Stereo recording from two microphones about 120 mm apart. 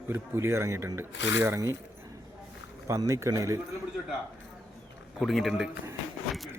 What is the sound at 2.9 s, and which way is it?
Speech, 25° right (ahead or behind).